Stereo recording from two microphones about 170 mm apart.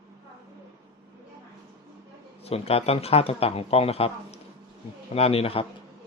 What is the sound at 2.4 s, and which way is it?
Speech, 35° left (ahead or behind).